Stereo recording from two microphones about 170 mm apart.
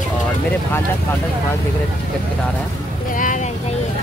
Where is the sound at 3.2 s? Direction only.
50° left (ahead or behind).